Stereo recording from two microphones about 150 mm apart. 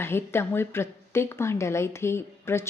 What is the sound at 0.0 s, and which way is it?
A woman's voice, 15° left (ahead or behind).